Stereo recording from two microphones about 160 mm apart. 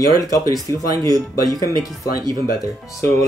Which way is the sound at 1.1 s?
25° right (ahead or behind).